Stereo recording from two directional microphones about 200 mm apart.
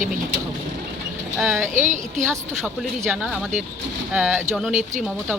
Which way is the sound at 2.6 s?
Centre (ahead or behind).